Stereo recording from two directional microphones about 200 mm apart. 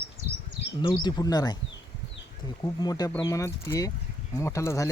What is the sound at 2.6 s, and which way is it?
Speech, 20° left (ahead or behind).